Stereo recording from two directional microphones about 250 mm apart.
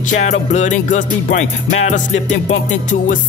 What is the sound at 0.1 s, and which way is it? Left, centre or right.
Music, left.